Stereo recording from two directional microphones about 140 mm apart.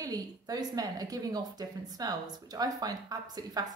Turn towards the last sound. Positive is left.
turn(degrees=-30)  # may be behind; listen again after turning